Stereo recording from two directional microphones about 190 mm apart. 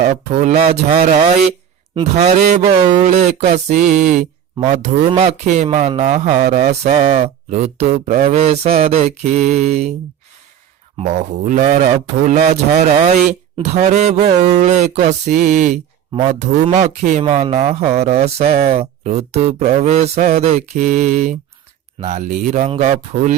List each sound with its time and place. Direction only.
0.0 s speech: 35° right (ahead or behind)
10.9 s speech: 40° right (ahead or behind)